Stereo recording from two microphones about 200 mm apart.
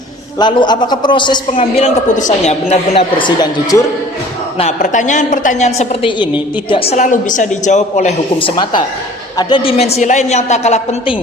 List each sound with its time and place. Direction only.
0.3 s a man's voice: 20° left (ahead or behind)
4.5 s a woman's voice: 35° left (ahead or behind)